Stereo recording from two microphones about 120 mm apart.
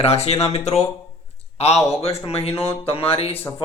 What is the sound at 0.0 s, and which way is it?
Speech, 60° left (ahead or behind).